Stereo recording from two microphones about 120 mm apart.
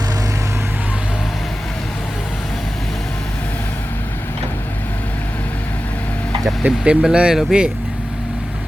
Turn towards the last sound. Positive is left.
turn(degrees=-5)  # may be behind; listen again after turning